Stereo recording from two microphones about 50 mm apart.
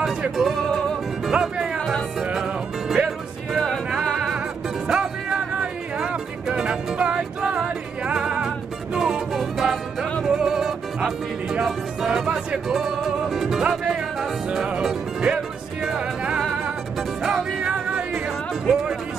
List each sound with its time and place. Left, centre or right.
0.4 s music: centre
1.3 s speech: centre
2.3 s music: centre
4.8 s music: centre